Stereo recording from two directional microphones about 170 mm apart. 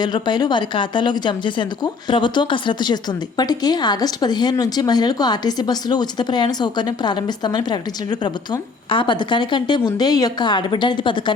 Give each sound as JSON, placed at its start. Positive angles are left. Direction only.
{"t": 0.0, "sound": "a woman's voice", "side_deg": 25}